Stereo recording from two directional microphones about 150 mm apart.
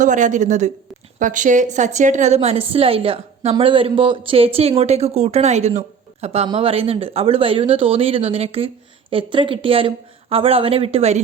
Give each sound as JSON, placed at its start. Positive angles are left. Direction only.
{"t": 0.0, "sound": "speech", "side_deg": -55}